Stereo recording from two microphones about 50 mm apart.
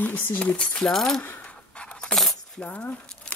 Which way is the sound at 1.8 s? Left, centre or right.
Centre.